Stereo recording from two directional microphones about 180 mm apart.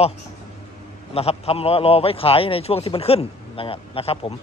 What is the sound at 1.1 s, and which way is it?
A man's voice, 35° left (ahead or behind).